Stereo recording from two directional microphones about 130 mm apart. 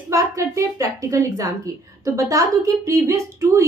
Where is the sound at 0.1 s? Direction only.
25° right (ahead or behind).